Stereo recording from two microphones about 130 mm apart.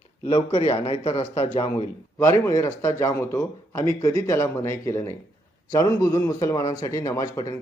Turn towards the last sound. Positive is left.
turn(degrees=25)  # may be behind; listen again after turning